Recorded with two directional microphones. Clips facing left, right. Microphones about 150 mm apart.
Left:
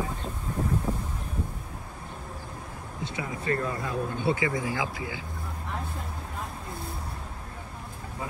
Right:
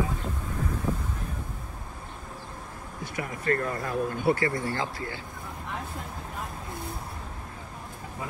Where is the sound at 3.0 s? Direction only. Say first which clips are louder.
Right 2 dB; 25° left (ahead or behind).